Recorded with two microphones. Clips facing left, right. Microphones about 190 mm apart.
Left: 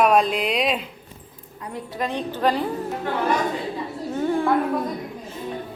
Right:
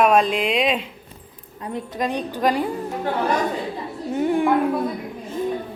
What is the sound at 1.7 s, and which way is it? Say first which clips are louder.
Speech: right 3 dB; 15° right (ahead or behind).